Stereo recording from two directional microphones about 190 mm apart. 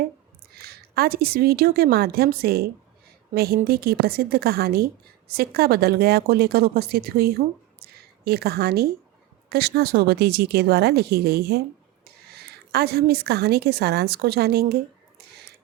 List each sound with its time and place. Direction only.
0.5 s a woman's voice: 55° right (ahead or behind)
7.8 s a sound: 55° right (ahead or behind)
9.5 s a woman's voice: 55° right (ahead or behind)